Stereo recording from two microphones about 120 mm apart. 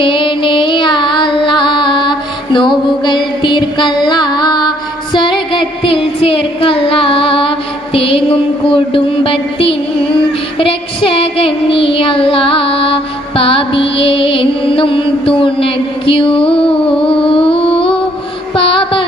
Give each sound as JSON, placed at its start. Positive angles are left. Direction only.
{"t": 0.0, "sound": "music", "side_deg": 45}
{"t": 5.1, "sound": "a sound", "side_deg": 40}
{"t": 10.6, "sound": "child singing", "side_deg": 50}
{"t": 17.1, "sound": "music", "side_deg": 50}